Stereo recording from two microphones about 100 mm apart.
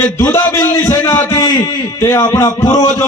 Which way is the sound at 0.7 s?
40° left (ahead or behind).